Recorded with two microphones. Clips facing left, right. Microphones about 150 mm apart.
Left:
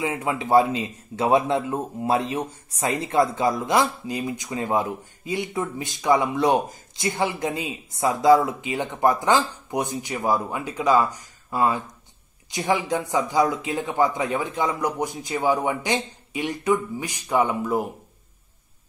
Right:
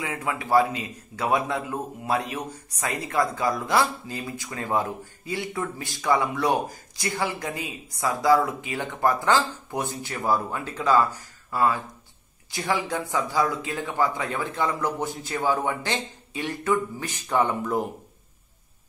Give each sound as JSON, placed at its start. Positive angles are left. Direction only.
{"t": 0.0, "sound": "a man's voice", "side_deg": 25}